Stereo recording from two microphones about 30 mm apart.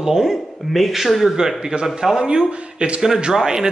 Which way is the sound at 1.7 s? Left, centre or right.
Right.